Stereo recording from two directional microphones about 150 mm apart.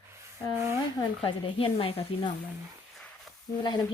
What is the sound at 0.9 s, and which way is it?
Speech, 35° left (ahead or behind).